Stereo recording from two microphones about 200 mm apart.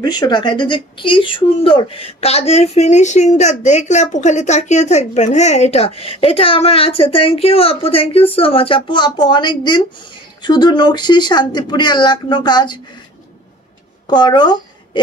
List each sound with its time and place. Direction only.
0.0 s speech: 20° left (ahead or behind)
14.0 s speech: 20° left (ahead or behind)